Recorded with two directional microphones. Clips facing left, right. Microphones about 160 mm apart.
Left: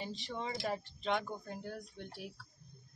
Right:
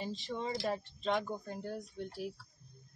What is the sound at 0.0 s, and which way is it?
Speech, centre (ahead or behind).